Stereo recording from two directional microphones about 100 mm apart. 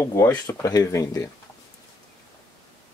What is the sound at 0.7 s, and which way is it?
Speech, 40° left (ahead or behind).